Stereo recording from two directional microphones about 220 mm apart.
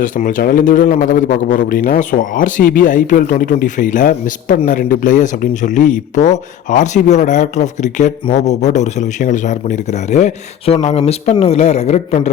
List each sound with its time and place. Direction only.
0.0 s a man's voice: 35° left (ahead or behind)